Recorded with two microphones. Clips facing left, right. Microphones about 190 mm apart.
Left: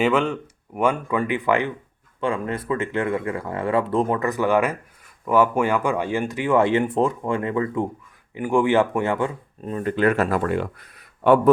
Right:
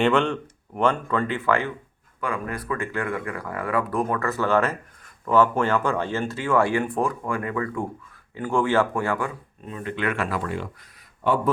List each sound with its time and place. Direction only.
0.0 s speech: 5° left (ahead or behind); by 9.3 s 20° left (ahead or behind)
9.6 s speech: 40° left (ahead or behind); by 11.3 s 60° left (ahead or behind)